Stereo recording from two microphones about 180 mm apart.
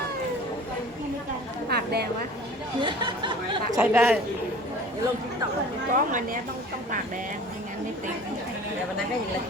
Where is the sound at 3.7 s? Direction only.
10° right (ahead or behind).